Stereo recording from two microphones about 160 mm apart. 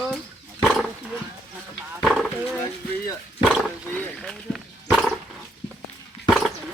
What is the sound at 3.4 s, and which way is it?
Roaring cats, 5° right (ahead or behind).